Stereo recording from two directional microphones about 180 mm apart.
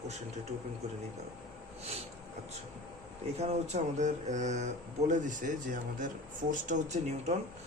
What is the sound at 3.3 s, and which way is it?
Speech, 35° right (ahead or behind).